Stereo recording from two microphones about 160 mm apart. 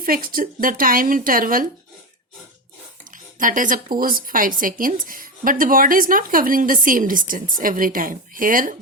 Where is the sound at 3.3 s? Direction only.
55° right (ahead or behind).